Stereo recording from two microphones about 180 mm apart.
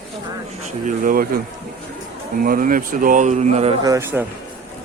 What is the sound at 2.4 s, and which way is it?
Speech, 50° right (ahead or behind).